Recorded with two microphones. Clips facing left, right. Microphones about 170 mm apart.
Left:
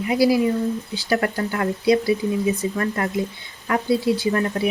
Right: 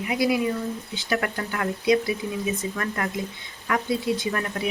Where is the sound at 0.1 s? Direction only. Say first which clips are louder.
Left 5 dB; 35° left (ahead or behind).